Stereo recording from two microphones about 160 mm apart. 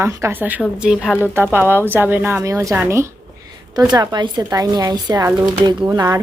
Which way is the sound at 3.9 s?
25° right (ahead or behind).